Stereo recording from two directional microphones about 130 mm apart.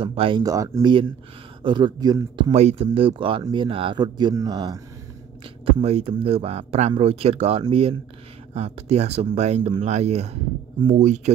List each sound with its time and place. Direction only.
0.0 s speech: 45° right (ahead or behind)
0.4 s speech: 25° right (ahead or behind)
1.6 s speech: 35° right (ahead or behind)
2.5 s speech: 55° right (ahead or behind); by 4.7 s 30° right (ahead or behind)
5.7 s speech: 50° right (ahead or behind)
9.6 s speech: 45° right (ahead or behind)
10.9 s speech: 65° right (ahead or behind)